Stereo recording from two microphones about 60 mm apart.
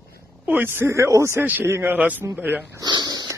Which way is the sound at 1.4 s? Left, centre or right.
Right.